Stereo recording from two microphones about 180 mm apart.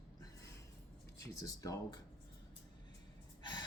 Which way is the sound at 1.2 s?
20° left (ahead or behind).